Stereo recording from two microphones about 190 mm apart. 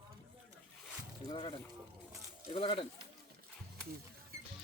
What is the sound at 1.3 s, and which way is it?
Speech, 25° left (ahead or behind).